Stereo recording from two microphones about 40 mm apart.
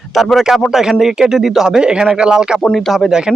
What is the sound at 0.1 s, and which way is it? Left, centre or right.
Speech, centre.